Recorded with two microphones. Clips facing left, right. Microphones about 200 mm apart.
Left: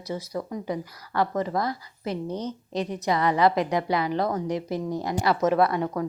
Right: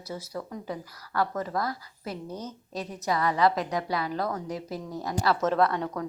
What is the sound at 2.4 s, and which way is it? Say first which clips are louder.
Speech: left 6 dB; 5° right (ahead or behind).